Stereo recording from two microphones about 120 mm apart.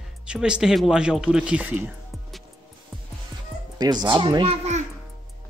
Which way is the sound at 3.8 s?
35° right (ahead or behind).